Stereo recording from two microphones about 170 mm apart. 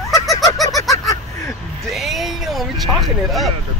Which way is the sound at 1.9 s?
Centre (ahead or behind).